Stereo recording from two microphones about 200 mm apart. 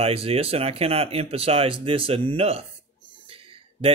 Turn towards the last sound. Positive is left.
turn(degrees=-25)  # may be behind; listen again after turning